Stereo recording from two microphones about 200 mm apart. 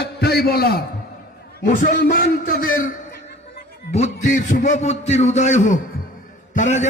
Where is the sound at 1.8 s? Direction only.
45° left (ahead or behind).